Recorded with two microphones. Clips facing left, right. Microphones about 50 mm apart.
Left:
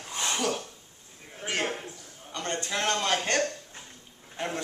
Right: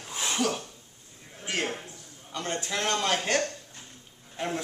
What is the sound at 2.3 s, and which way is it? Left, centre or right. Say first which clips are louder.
Speech: even; centre.